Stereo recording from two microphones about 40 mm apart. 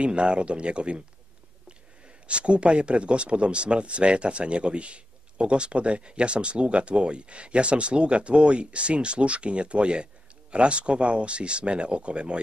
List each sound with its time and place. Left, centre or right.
0.0 s speech: right
2.2 s speech: right